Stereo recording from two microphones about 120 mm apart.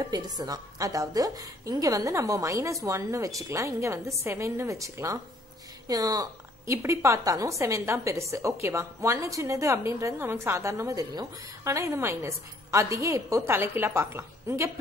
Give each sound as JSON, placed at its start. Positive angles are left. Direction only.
{"t": 0.0, "sound": "a woman's voice", "side_deg": -30}